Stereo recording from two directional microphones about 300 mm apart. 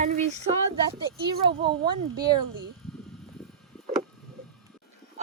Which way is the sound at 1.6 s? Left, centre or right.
Centre.